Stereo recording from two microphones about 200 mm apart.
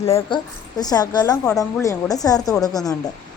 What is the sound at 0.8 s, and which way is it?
A woman's voice, 20° left (ahead or behind).